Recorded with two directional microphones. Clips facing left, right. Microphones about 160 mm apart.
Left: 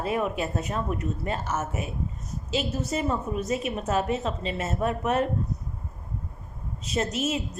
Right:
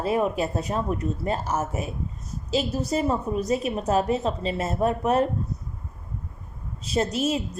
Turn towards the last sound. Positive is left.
turn(degrees=-35)  # may be behind; listen again after turning